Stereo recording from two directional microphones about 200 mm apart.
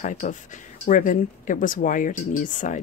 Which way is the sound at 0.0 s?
40° left (ahead or behind).